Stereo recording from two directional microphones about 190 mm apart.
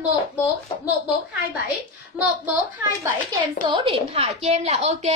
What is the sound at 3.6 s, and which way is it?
A woman's voice, 30° right (ahead or behind).